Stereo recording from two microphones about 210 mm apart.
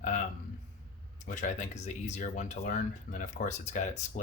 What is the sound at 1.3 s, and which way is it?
Speech, 35° left (ahead or behind).